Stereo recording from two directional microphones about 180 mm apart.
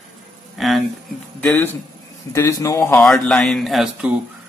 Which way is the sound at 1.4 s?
10° left (ahead or behind).